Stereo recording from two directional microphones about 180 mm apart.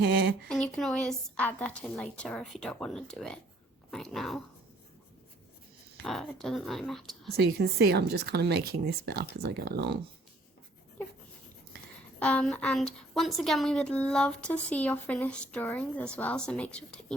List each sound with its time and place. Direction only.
0.4 s a woman's voice: 5° left (ahead or behind)
6.0 s a woman's voice: centre (ahead or behind)
7.6 s speech: 65° right (ahead or behind)
12.2 s a woman's voice: 5° left (ahead or behind)